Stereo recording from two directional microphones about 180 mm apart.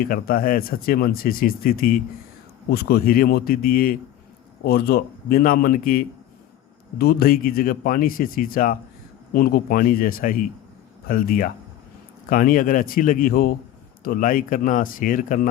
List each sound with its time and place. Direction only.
0.0 s speech: 55° left (ahead or behind)